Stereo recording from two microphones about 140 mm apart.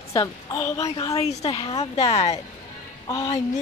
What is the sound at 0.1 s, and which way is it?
A woman's voice, 20° left (ahead or behind).